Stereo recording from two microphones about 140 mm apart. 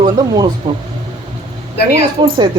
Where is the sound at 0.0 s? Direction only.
30° right (ahead or behind).